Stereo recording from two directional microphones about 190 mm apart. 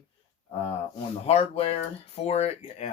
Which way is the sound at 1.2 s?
30° left (ahead or behind).